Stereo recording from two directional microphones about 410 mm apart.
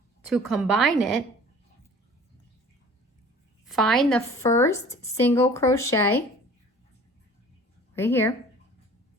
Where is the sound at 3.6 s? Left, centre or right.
Centre.